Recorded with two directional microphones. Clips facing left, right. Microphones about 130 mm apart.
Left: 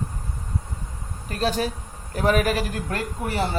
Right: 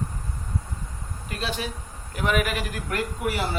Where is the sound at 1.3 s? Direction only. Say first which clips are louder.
Left 6 dB; 40° left (ahead or behind).